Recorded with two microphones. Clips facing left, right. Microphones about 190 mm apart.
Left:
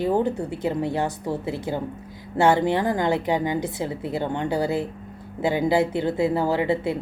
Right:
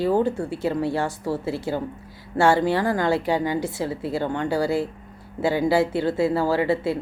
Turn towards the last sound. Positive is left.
turn(degrees=20)  # may be behind; listen again after turning